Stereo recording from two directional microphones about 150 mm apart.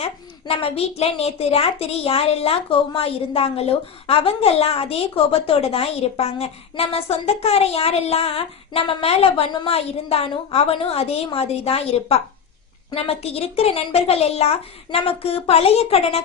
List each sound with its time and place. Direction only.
0.0 s a woman's voice: 40° left (ahead or behind)